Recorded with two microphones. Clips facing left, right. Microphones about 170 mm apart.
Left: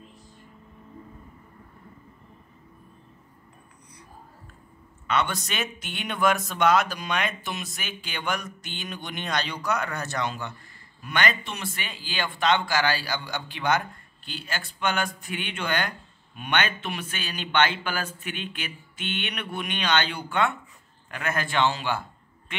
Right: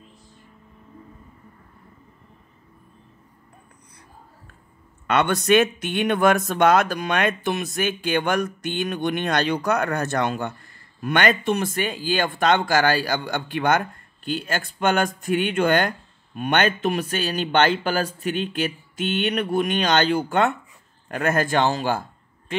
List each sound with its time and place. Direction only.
5.0 s speech: 55° right (ahead or behind)